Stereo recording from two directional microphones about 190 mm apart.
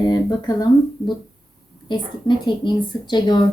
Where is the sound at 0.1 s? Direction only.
20° left (ahead or behind).